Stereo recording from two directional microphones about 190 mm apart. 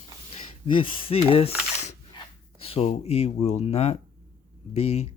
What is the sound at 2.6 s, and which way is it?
Speech, 30° left (ahead or behind).